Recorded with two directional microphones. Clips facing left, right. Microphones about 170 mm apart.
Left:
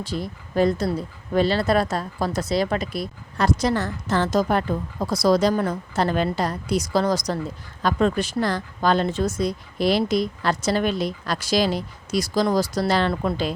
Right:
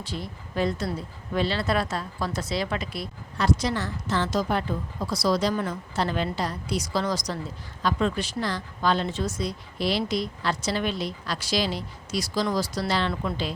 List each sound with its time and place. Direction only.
0.0 s a woman's voice: 40° left (ahead or behind)